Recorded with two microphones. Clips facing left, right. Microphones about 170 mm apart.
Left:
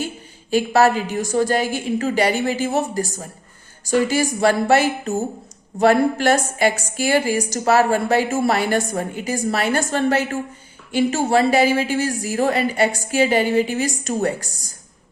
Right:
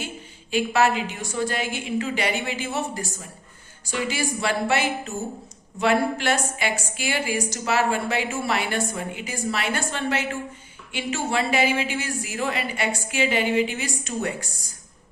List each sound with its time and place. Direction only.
0.5 s a woman's voice: 40° left (ahead or behind)